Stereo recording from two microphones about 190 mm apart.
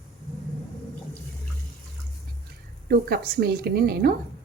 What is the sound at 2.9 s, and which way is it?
A woman's voice, 55° right (ahead or behind).